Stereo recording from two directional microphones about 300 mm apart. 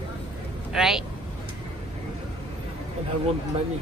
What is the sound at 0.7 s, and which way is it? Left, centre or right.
Speech, centre.